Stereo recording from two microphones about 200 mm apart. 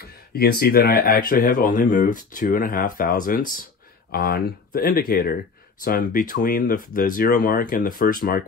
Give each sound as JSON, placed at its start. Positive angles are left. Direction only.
{"t": 0.0, "sound": "speech", "side_deg": 50}